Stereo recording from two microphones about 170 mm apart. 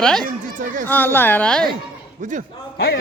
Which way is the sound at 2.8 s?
70° left (ahead or behind).